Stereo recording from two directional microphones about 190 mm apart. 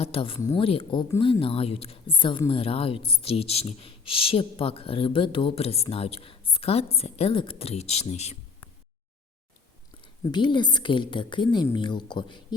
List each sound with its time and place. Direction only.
0.0 s a woman's voice: 30° left (ahead or behind)
0.3 s a woman's voice: 20° left (ahead or behind)
0.6 s a woman's voice: 30° left (ahead or behind)
10.0 s a woman's voice: 25° left (ahead or behind)